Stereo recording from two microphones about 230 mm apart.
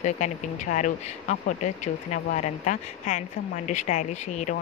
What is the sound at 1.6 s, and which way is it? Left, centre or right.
Speech, left.